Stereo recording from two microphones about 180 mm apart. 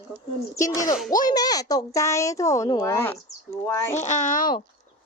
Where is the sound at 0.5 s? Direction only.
20° left (ahead or behind).